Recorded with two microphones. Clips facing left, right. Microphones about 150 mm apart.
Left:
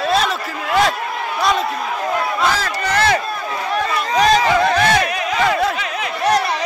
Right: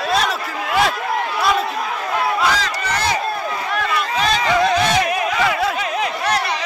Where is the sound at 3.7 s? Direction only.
40° left (ahead or behind).